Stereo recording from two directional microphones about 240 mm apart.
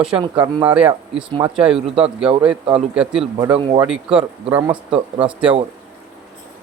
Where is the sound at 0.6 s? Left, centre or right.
Centre.